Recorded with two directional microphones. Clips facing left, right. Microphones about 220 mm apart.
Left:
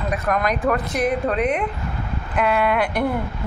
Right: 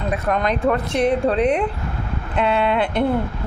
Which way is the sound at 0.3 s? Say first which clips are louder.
Right 1 dB; 25° right (ahead or behind).